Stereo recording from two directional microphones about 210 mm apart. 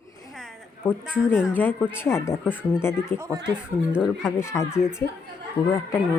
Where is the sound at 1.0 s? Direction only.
5° right (ahead or behind).